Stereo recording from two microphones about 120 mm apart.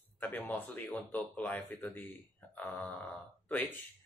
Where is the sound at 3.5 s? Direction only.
10° left (ahead or behind).